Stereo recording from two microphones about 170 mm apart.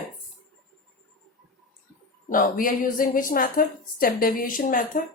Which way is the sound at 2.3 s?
55° left (ahead or behind).